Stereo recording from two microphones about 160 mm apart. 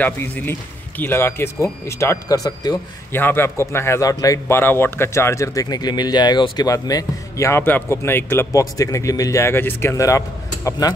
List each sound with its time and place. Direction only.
0.0 s speech: 10° left (ahead or behind)
3.1 s a man's voice: 15° left (ahead or behind)